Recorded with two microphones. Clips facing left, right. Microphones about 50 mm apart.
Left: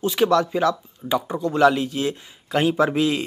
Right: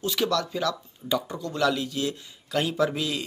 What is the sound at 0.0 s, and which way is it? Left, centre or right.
Speech, left.